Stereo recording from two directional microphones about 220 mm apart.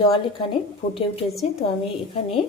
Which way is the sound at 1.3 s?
Centre (ahead or behind).